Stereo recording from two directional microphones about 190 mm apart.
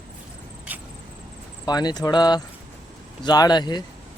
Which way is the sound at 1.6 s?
20° left (ahead or behind).